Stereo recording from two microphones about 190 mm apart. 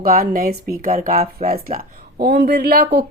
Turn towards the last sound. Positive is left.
turn(degrees=-55)  # may be behind; listen again after turning